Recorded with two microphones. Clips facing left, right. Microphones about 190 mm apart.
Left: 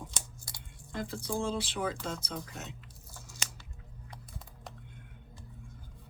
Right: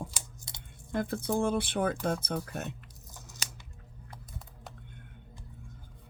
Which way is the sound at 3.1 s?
20° right (ahead or behind).